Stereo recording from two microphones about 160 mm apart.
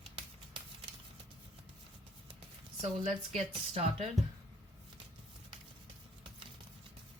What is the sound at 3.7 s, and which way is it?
Speech, 35° right (ahead or behind).